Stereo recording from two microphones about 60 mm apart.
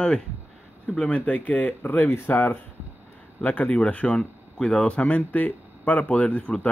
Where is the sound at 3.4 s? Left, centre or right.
Left.